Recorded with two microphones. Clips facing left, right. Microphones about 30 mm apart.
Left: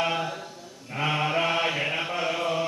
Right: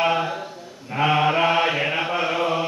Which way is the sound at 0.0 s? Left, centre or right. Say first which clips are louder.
Right 6 dB; centre.